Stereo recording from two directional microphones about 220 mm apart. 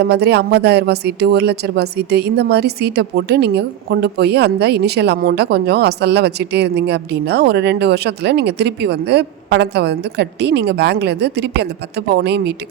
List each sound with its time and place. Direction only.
0.0 s speech: 50° right (ahead or behind)